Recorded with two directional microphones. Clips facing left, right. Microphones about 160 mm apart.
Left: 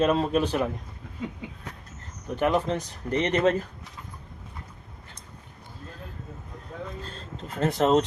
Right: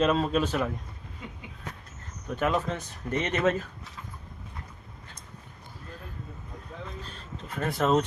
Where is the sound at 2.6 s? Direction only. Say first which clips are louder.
Left 4 dB; 35° left (ahead or behind).